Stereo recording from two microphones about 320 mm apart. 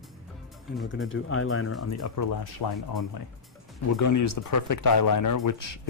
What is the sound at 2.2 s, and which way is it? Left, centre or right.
Speech, left.